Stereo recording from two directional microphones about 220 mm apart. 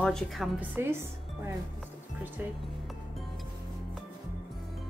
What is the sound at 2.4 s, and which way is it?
Speech, 5° right (ahead or behind).